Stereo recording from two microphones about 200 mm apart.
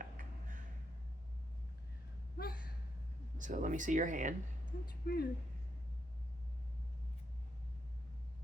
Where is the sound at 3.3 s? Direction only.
40° right (ahead or behind).